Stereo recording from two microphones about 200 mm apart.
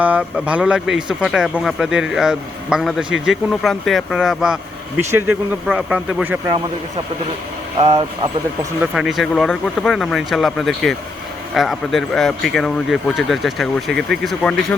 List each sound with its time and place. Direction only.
0.0 s speech: 5° right (ahead or behind)
7.8 s speech: 20° right (ahead or behind)
8.8 s speech: 5° right (ahead or behind)